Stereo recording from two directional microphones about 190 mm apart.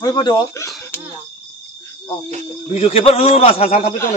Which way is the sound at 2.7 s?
30° left (ahead or behind).